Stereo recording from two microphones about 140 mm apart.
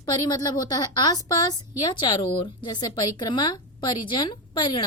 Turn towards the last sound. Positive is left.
turn(degrees=35)  # may be behind; listen again after turning